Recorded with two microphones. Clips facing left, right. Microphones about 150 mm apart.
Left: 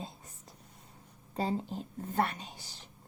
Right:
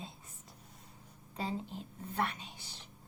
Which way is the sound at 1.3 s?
40° left (ahead or behind).